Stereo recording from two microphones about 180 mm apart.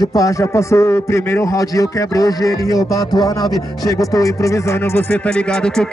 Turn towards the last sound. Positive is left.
turn(degrees=5)  # may be behind; listen again after turning